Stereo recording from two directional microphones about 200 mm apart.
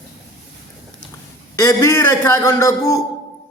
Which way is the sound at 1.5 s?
15° left (ahead or behind).